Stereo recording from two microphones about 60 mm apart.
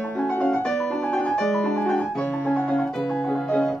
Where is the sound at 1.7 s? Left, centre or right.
Centre.